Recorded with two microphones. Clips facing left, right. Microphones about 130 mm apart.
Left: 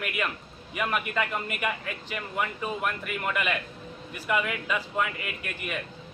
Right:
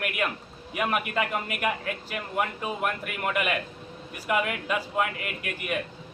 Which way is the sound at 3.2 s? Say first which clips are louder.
Right 3 dB; 5° right (ahead or behind).